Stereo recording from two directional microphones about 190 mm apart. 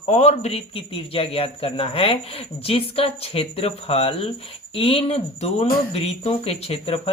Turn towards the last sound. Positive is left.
turn(degrees=30)  # may be behind; listen again after turning